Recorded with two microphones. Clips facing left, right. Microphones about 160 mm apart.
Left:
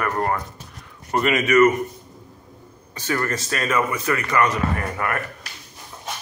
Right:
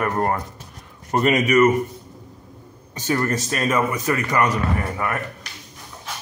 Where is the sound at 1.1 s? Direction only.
35° right (ahead or behind).